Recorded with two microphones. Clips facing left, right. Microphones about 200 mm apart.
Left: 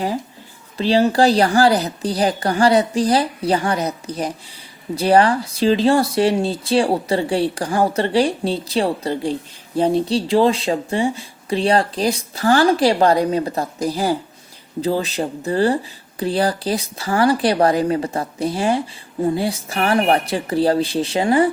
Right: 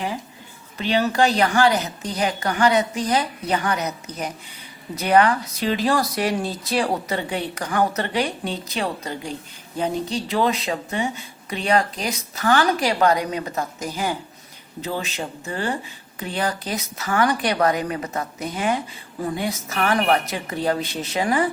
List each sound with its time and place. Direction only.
0.8 s speech: 30° left (ahead or behind)